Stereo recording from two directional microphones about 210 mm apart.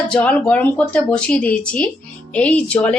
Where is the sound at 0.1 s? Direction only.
5° left (ahead or behind).